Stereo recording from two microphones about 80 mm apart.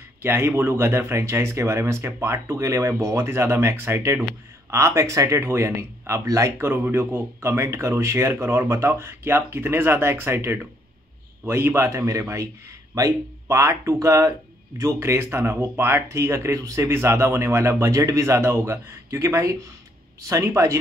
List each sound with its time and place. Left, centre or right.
0.2 s speech: right
6.6 s speech: right